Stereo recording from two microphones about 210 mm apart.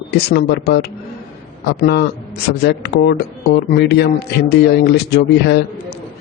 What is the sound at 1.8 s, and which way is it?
Speech, 50° left (ahead or behind).